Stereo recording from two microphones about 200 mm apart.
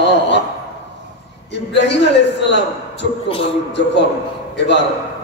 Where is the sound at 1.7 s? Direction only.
60° left (ahead or behind).